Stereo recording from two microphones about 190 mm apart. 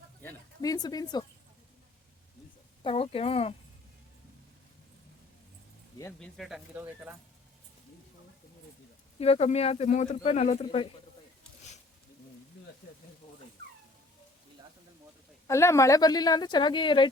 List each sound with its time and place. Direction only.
0.2 s a sound: 15° left (ahead or behind)
2.8 s speech: 30° left (ahead or behind)
6.1 s speech: centre (ahead or behind)
6.7 s speech: 10° right (ahead or behind)
9.1 s speech: 30° left (ahead or behind)
15.4 s speech: 15° left (ahead or behind)